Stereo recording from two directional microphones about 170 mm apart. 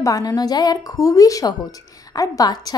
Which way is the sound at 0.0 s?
20° left (ahead or behind).